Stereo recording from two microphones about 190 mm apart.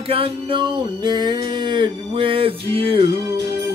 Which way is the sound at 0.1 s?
30° right (ahead or behind).